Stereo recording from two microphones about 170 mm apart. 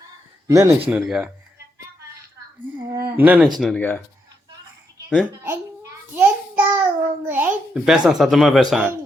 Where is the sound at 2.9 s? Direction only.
15° right (ahead or behind).